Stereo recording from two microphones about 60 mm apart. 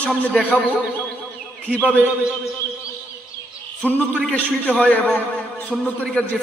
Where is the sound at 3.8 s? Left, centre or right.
Left.